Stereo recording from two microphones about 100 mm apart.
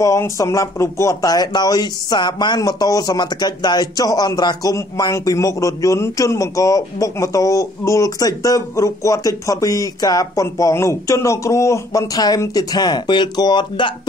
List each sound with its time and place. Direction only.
0.0 s a man's voice: 30° left (ahead or behind); by 13.9 s 50° left (ahead or behind)